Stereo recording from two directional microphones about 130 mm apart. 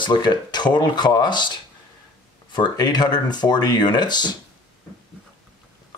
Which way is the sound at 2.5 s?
35° left (ahead or behind).